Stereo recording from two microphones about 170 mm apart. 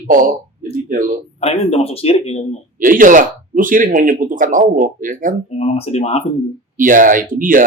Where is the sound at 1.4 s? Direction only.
35° left (ahead or behind).